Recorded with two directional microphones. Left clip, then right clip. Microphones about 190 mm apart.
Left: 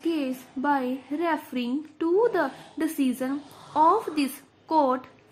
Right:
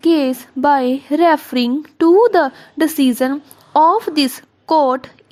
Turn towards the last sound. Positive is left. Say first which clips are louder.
# right 9 dB
turn(degrees=-40)  # may be behind; listen again after turning